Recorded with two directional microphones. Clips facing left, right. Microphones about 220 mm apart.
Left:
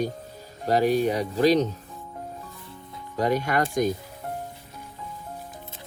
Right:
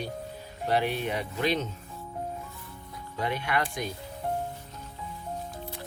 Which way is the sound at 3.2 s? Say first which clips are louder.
Left 6 dB; 40° left (ahead or behind).